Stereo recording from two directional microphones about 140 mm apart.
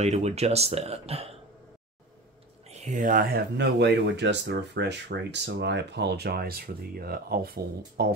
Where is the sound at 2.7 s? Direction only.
60° right (ahead or behind); by 3.5 s 90° right.